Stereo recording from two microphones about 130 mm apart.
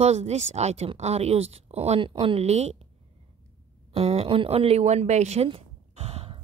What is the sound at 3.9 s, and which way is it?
Speech, 50° right (ahead or behind).